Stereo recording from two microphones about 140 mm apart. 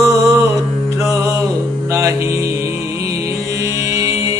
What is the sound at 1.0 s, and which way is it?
Music, 20° right (ahead or behind).